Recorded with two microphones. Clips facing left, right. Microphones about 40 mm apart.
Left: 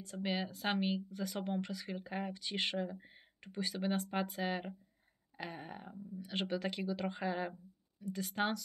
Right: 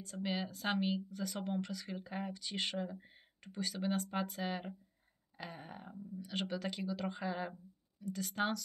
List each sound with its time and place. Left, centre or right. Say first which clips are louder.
0.0 s speech: left 1 dB; centre